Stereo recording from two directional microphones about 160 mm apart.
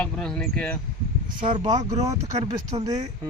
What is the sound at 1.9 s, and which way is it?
Speech, 20° right (ahead or behind).